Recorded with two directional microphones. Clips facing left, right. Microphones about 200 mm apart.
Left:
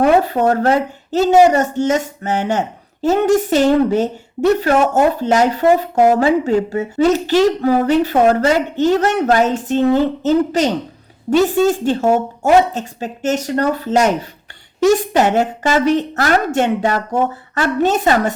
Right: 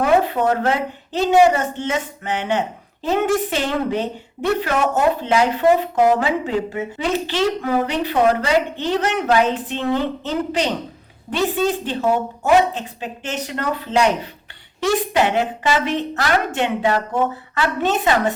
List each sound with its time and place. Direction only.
0.0 s speech: 40° left (ahead or behind)